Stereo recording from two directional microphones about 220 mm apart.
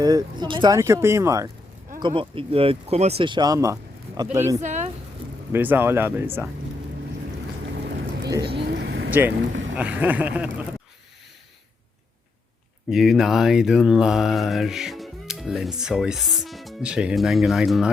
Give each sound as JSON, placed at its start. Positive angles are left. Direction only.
{"t": 0.0, "sound": "speech", "side_deg": -15}
{"t": 4.6, "sound": "a sound", "side_deg": -35}
{"t": 5.5, "sound": "speech", "side_deg": -10}
{"t": 7.8, "sound": "vehicle", "side_deg": -50}
{"t": 8.3, "sound": "speech", "side_deg": -20}
{"t": 8.5, "sound": "vehicle", "side_deg": -50}
{"t": 9.0, "sound": "boat", "side_deg": -10}
{"t": 9.7, "sound": "speech", "side_deg": -5}
{"t": 12.9, "sound": "mantra", "side_deg": 0}